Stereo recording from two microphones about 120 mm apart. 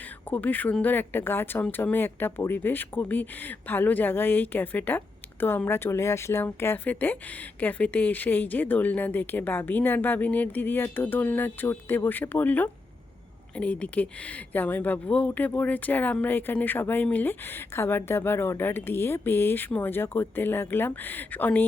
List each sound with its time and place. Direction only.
0.3 s speech: 15° left (ahead or behind)